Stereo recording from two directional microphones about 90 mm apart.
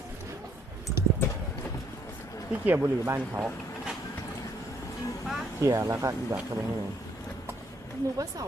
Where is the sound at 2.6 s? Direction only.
25° right (ahead or behind).